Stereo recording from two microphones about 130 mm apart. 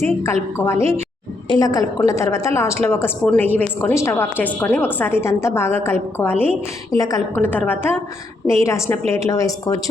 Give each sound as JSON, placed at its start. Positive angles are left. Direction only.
{"t": 0.0, "sound": "a woman's voice", "side_deg": 20}
{"t": 1.5, "sound": "a woman's voice", "side_deg": 30}
{"t": 6.9, "sound": "a woman's voice", "side_deg": 25}
{"t": 7.3, "sound": "a woman's voice", "side_deg": 15}